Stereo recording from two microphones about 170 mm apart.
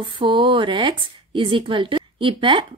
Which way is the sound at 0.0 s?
30° right (ahead or behind).